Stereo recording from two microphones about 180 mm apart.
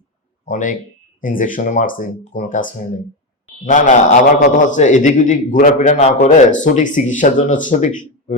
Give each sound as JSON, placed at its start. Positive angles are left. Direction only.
{"t": 0.4, "sound": "a man's voice", "side_deg": 45}